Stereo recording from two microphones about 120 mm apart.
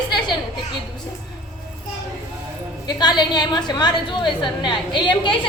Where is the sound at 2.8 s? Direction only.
35° left (ahead or behind).